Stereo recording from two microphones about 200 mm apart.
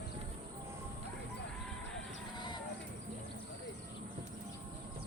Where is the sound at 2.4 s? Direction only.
20° left (ahead or behind).